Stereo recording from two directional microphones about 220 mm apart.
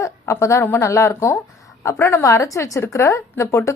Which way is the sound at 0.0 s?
15° left (ahead or behind).